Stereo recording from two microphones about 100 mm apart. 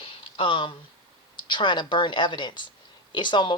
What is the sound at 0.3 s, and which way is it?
Speech, 60° left (ahead or behind).